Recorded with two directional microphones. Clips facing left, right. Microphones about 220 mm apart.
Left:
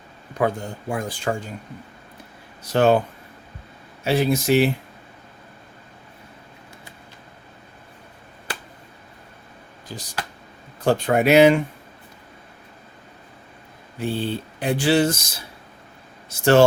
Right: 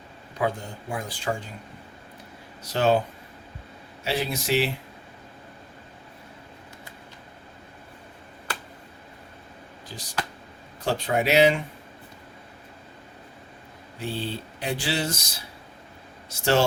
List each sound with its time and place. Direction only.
0.3 s speech: 50° left (ahead or behind)
2.7 s speech: 55° left (ahead or behind)
4.0 s speech: 50° left (ahead or behind)
9.9 s speech: 50° left (ahead or behind)
14.0 s speech: 50° left (ahead or behind)
16.4 s speech: 55° left (ahead or behind)